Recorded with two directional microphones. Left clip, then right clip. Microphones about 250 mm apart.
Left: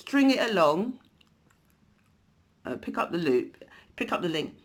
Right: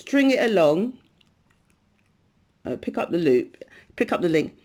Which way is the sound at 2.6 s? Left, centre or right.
Centre.